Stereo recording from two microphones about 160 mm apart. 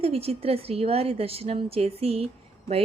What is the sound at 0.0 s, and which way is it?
A woman's voice, 40° right (ahead or behind).